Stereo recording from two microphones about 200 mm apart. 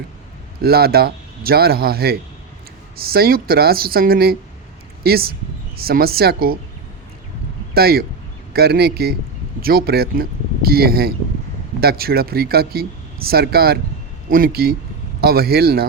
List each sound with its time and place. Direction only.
0.6 s speech: 50° right (ahead or behind)
7.7 s speech: 50° right (ahead or behind)